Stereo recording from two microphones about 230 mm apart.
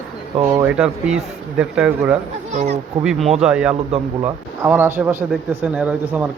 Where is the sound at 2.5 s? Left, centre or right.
Right.